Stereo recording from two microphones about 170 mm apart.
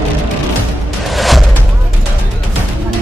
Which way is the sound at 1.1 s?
Centre (ahead or behind).